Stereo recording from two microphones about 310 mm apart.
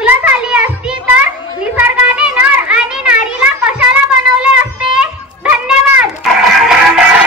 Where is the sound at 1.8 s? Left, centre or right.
Centre.